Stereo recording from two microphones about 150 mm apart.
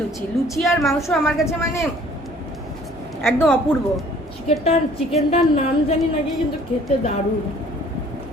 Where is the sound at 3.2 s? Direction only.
15° left (ahead or behind).